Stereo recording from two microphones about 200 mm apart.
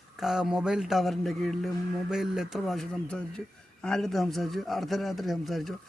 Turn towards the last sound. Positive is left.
turn(degrees=0)  # may be behind; listen again after turning